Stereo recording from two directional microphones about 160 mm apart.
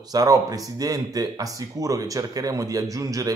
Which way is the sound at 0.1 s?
20° right (ahead or behind).